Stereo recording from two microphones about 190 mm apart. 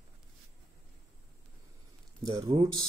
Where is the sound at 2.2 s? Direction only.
20° right (ahead or behind).